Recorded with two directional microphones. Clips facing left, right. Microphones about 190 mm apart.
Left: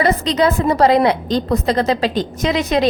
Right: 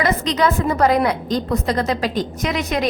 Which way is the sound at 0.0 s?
30° left (ahead or behind).